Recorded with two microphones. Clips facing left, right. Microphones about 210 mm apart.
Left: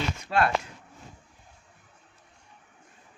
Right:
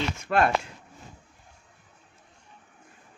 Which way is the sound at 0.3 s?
60° right (ahead or behind).